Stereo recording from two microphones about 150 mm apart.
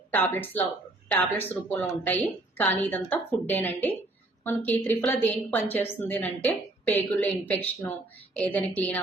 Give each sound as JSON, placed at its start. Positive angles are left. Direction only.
{"t": 0.1, "sound": "a woman's voice", "side_deg": 15}